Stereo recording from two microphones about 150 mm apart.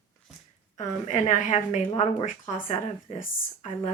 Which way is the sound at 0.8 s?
50° left (ahead or behind).